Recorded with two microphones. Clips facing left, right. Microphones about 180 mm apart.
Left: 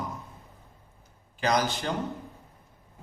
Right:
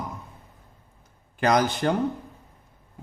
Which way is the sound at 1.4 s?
55° right (ahead or behind).